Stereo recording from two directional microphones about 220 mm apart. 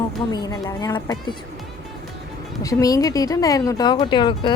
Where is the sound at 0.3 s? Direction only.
20° left (ahead or behind).